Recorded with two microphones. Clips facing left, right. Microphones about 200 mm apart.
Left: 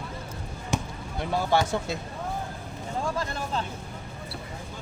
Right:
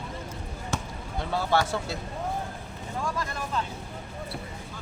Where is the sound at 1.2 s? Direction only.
15° left (ahead or behind).